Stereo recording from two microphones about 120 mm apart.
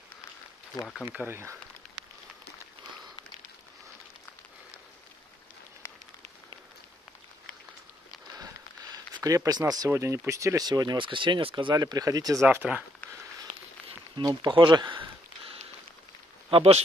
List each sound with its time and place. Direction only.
1.0 s speech: 20° right (ahead or behind)
9.1 s speech: 25° right (ahead or behind)
12.4 s speech: 15° right (ahead or behind)
14.2 s speech: 40° right (ahead or behind)
16.4 s speech: 55° right (ahead or behind)